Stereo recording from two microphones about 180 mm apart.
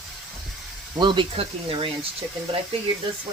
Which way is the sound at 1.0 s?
25° right (ahead or behind).